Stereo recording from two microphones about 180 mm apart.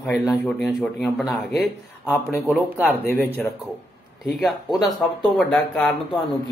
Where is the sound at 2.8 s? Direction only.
10° left (ahead or behind).